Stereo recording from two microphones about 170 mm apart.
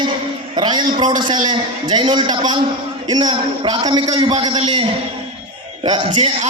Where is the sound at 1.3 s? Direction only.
25° right (ahead or behind).